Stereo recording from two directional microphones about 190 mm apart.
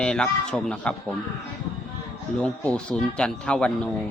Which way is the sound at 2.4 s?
5° left (ahead or behind).